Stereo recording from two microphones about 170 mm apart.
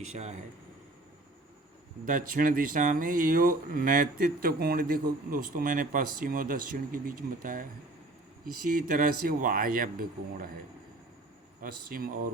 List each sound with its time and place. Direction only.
0.1 s speech: 40° right (ahead or behind)
2.0 s speech: 55° right (ahead or behind)
11.6 s speech: 60° right (ahead or behind)